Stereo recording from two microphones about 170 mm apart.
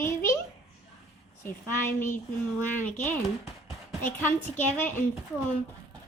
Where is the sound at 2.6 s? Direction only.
10° left (ahead or behind).